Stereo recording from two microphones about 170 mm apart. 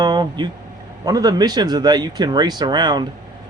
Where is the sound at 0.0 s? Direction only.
25° right (ahead or behind).